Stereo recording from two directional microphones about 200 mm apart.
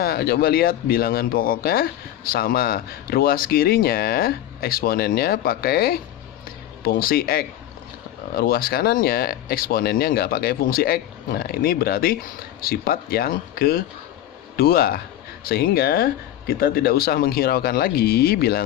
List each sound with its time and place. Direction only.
0.0 s speech: 50° left (ahead or behind)